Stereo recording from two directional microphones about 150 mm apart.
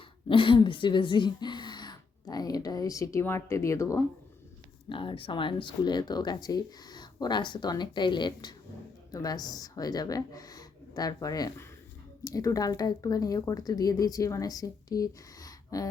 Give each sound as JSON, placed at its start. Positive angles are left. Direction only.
{"t": 0.3, "sound": "a woman's voice", "side_deg": 35}
{"t": 4.9, "sound": "speech", "side_deg": 35}